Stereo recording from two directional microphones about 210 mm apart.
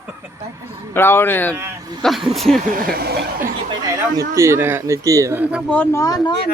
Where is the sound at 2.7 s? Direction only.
45° right (ahead or behind).